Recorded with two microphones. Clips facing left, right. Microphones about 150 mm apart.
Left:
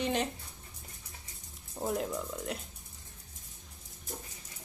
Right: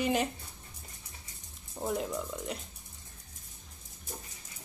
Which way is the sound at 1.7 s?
Centre (ahead or behind).